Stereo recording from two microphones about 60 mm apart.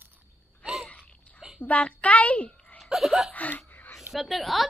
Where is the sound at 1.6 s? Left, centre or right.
Left.